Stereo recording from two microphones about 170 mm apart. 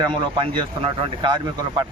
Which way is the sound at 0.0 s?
30° right (ahead or behind).